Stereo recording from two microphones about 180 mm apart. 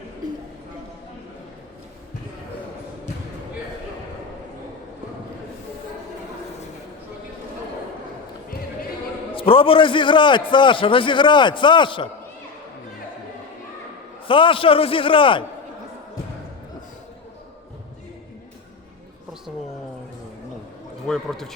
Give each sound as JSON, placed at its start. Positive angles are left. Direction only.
{"t": 9.3, "sound": "a man's voice", "side_deg": 30}
{"t": 14.3, "sound": "a man's voice", "side_deg": 30}
{"t": 21.1, "sound": "speech", "side_deg": 0}